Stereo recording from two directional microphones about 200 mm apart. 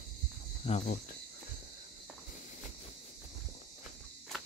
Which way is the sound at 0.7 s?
35° left (ahead or behind).